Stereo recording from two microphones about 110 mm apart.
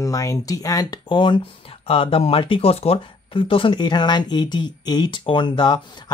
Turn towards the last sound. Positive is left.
turn(degrees=45)  # may be behind; listen again after turning